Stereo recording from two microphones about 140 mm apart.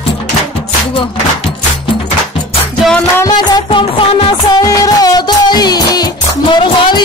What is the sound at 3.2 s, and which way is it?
Music, 35° left (ahead or behind).